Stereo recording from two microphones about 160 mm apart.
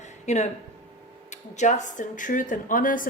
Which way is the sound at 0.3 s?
45° left (ahead or behind).